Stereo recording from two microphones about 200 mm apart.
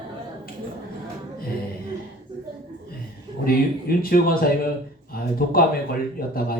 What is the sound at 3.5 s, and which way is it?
A man's voice, 50° left (ahead or behind).